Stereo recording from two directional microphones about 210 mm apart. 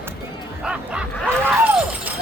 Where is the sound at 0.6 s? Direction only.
5° right (ahead or behind).